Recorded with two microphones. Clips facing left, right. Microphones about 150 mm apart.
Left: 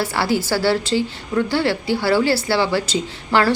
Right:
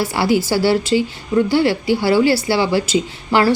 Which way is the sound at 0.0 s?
15° right (ahead or behind).